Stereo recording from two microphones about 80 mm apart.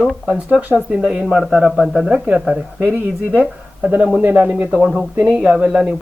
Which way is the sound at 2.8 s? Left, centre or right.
Centre.